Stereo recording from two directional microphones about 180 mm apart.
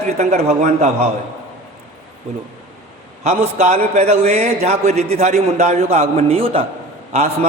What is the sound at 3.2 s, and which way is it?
A man's voice, 35° right (ahead or behind).